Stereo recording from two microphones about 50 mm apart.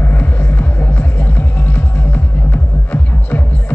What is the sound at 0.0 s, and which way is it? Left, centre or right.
Music, left.